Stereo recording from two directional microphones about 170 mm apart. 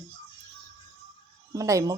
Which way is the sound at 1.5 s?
20° right (ahead or behind).